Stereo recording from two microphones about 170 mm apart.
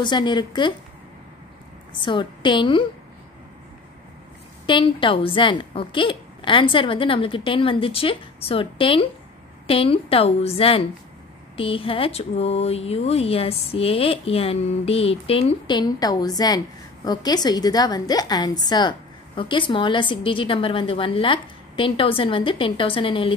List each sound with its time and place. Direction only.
0.0 s a woman's voice: 25° left (ahead or behind)
2.0 s a woman's voice: 30° left (ahead or behind)
4.6 s speech: 30° left (ahead or behind)